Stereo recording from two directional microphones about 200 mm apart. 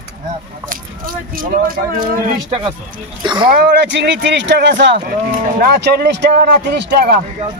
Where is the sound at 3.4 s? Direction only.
50° right (ahead or behind).